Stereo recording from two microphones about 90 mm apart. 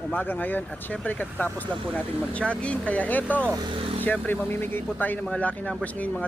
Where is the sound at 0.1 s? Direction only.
20° left (ahead or behind).